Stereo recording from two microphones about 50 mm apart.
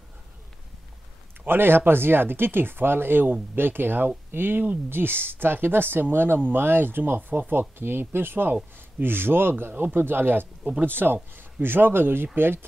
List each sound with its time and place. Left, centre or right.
1.4 s speech: right